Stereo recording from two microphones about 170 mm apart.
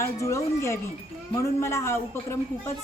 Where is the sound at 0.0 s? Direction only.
15° left (ahead or behind).